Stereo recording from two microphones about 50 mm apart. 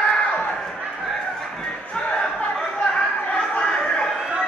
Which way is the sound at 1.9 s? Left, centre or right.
Left.